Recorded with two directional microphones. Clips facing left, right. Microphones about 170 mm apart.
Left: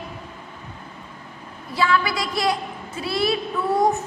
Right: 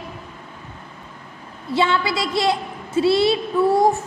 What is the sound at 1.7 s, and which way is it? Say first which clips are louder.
A woman's voice: right 2 dB; 25° right (ahead or behind).